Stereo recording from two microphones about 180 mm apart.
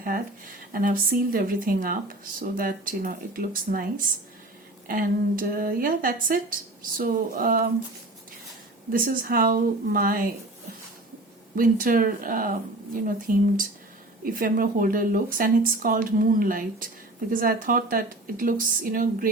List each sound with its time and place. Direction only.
0.0 s a woman's voice: 50° right (ahead or behind)
8.9 s a woman's voice: 55° right (ahead or behind)
11.5 s a woman's voice: 50° right (ahead or behind)